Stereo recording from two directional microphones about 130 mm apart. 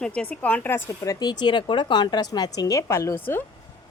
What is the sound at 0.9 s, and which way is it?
A woman's voice, 30° left (ahead or behind).